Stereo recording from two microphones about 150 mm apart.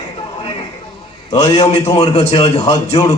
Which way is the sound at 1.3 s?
40° left (ahead or behind).